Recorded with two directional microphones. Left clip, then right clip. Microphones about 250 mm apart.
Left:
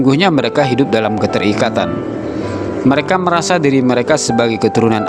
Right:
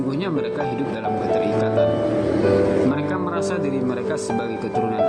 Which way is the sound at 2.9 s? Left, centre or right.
Left.